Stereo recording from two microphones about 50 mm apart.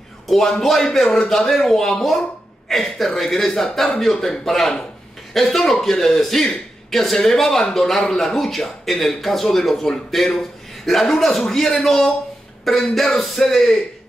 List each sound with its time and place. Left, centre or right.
0.3 s a man's voice: centre